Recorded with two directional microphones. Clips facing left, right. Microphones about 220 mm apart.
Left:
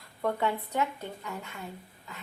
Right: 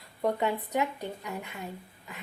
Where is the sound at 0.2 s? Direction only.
15° right (ahead or behind).